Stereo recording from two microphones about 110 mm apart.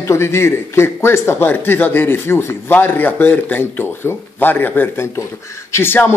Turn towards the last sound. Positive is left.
turn(degrees=20)  # may be behind; listen again after turning